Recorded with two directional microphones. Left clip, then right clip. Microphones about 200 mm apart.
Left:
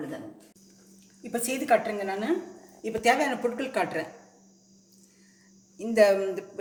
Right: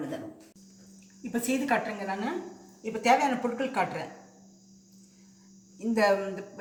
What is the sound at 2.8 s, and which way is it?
Speech, 55° left (ahead or behind).